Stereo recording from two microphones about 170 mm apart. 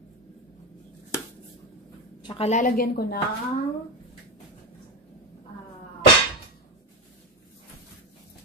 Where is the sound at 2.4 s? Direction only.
50° left (ahead or behind).